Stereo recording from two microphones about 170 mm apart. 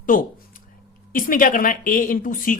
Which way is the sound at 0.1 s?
50° left (ahead or behind).